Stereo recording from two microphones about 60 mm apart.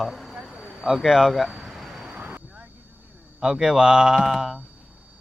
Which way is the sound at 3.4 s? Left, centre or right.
Centre.